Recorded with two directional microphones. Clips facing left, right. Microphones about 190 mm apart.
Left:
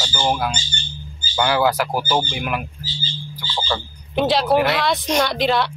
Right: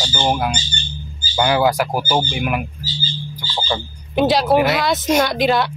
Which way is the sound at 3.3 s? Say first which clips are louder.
Right 1 dB; 15° right (ahead or behind).